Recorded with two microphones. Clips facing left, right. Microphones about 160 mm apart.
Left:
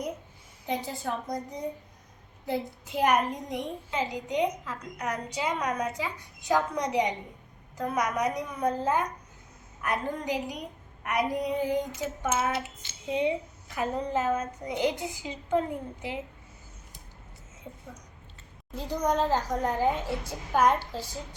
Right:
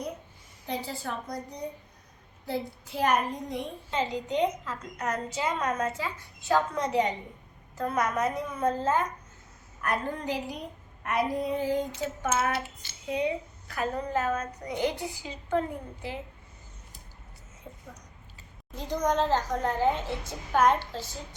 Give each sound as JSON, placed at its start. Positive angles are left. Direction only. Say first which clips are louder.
{"t": 0.7, "sound": "a child's voice", "louder": "left 2 dB", "side_deg": 20}
{"t": 2.5, "sound": "a child's voice", "louder": "left 2 dB", "side_deg": 15}
{"t": 18.8, "sound": "a child's voice", "louder": "even", "side_deg": 10}